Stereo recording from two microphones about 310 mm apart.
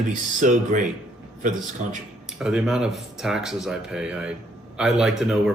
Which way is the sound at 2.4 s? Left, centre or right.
Centre.